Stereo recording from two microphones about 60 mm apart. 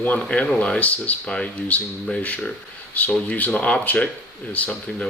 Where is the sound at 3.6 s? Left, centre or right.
Centre.